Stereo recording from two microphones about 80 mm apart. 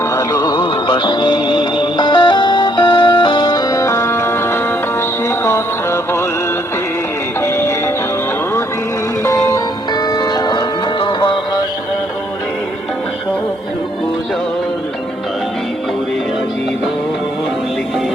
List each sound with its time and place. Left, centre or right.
0.1 s music: left
0.5 s music: left
7.4 s music: left
9.9 s music: left